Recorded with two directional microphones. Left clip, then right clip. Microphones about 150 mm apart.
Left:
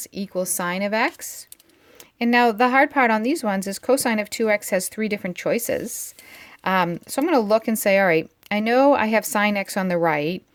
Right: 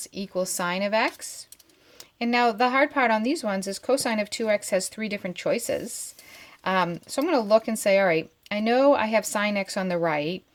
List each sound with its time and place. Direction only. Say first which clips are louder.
0.1 s speech: left 2 dB; 40° left (ahead or behind)
2.1 s speech: left 4 dB; 45° left (ahead or behind)